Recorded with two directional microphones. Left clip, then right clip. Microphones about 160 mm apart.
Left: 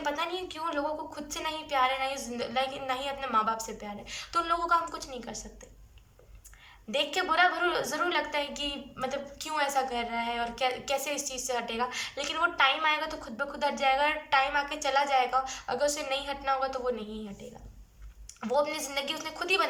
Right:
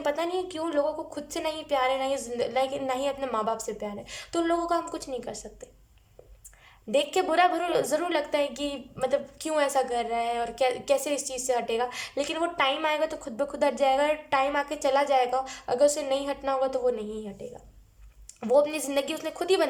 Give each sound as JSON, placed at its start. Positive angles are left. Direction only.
{"t": 0.0, "sound": "a woman's voice", "side_deg": -45}
{"t": 6.9, "sound": "a woman's voice", "side_deg": -45}
{"t": 18.3, "sound": "a woman's voice", "side_deg": -50}